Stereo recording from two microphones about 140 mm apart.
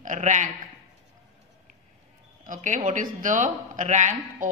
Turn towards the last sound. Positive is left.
turn(degrees=-60)  # may be behind; listen again after turning